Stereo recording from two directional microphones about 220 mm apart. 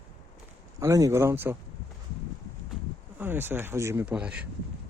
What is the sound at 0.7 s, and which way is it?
Speech, 15° right (ahead or behind).